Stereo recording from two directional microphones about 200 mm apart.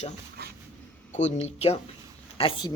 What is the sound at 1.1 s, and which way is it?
Speech, 35° left (ahead or behind).